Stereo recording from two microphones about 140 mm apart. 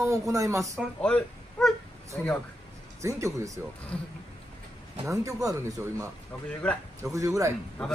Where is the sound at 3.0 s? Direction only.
20° right (ahead or behind).